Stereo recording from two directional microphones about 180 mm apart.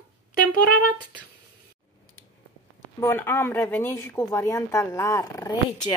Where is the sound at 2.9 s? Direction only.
15° left (ahead or behind).